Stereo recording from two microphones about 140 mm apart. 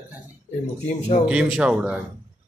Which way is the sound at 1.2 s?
5° right (ahead or behind).